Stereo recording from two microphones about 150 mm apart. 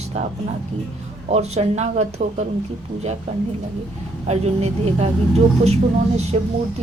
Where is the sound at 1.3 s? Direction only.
45° right (ahead or behind).